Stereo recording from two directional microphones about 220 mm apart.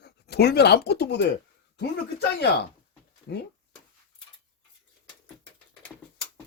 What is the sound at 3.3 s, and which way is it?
Speech, 55° left (ahead or behind).